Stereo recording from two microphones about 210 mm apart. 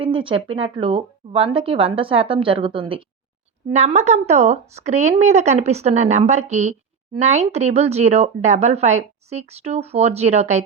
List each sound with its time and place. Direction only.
0.0 s speech: 25° right (ahead or behind)